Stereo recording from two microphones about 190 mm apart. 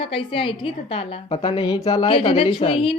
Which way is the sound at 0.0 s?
30° left (ahead or behind).